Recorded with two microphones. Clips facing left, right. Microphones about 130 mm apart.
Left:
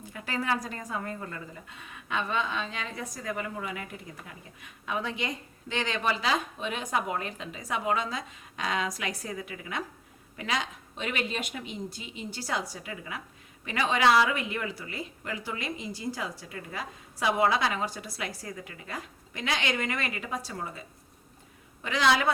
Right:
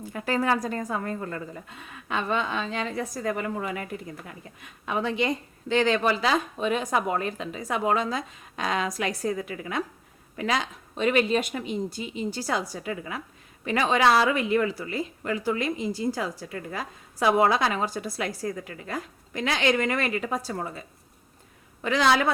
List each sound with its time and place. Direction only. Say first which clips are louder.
0.1 s a woman's voice: right 6 dB; 45° right (ahead or behind)
5.2 s a woman's voice: right 8 dB; 35° right (ahead or behind)
21.8 s a woman's voice: right 3 dB; 40° right (ahead or behind)